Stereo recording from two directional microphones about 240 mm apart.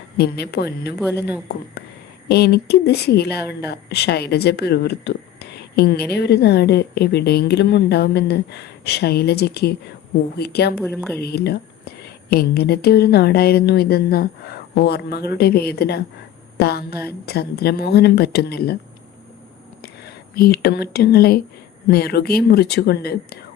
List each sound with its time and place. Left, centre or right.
0.2 s speech: left
2.3 s speech: left
10.8 s speech: centre
11.2 s speech: left
20.3 s speech: left